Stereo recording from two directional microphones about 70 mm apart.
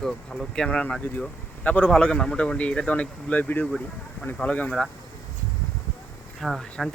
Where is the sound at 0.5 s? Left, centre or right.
Centre.